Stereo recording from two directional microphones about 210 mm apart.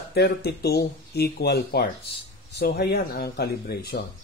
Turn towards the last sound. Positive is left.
turn(degrees=50)  # may be behind; listen again after turning